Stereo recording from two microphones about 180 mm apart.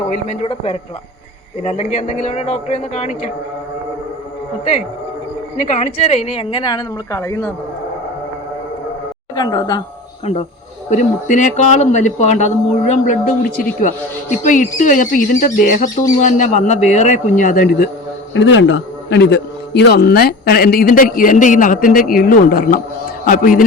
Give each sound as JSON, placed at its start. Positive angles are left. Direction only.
{"t": 0.1, "sound": "speech", "side_deg": 35}
{"t": 5.5, "sound": "speech", "side_deg": 40}
{"t": 9.3, "sound": "speech", "side_deg": 20}
{"t": 10.3, "sound": "speech", "side_deg": 40}
{"t": 18.3, "sound": "a man's voice", "side_deg": 90}